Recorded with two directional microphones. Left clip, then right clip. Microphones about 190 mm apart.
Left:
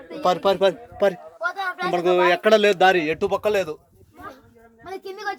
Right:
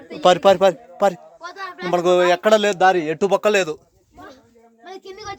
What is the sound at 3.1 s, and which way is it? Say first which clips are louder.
Speech: right 4 dB; 50° right (ahead or behind).